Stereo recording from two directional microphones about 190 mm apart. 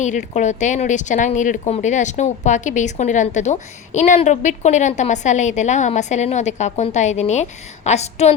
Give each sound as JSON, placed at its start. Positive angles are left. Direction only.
{"t": 0.0, "sound": "speech", "side_deg": 40}